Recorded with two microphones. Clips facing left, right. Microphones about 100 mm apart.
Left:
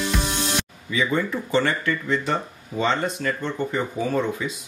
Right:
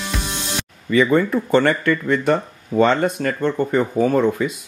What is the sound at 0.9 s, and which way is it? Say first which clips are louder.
Speech: right 8 dB; 55° right (ahead or behind).